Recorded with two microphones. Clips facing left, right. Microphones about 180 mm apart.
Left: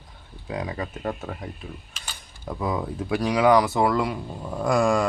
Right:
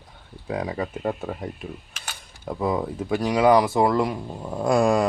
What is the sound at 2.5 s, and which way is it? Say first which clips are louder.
Speech: right 3 dB; 5° right (ahead or behind).